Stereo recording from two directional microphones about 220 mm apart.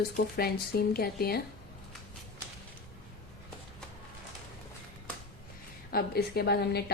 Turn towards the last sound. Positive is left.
turn(degrees=45)  # may be behind; listen again after turning